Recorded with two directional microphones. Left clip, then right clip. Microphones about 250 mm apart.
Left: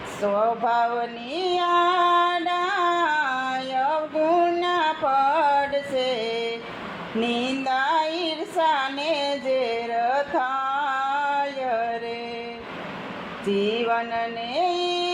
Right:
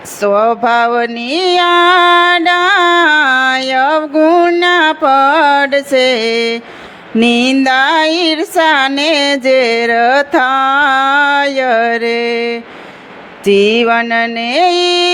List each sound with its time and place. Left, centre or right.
0.3 s mantra: right
7.2 s a sound: right
13.5 s mantra: right